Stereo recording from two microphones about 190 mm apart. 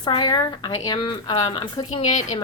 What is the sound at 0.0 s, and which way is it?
Speech, 20° left (ahead or behind).